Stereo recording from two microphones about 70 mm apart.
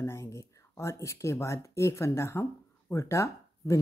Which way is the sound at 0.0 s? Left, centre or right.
Left.